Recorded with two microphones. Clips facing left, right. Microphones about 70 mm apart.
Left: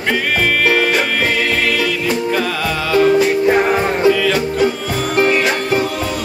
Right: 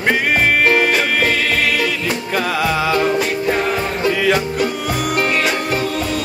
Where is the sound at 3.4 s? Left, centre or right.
Left.